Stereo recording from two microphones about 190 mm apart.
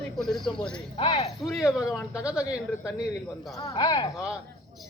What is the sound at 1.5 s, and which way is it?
Speech, centre (ahead or behind).